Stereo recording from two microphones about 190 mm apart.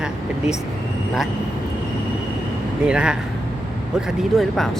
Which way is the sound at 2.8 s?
5° right (ahead or behind).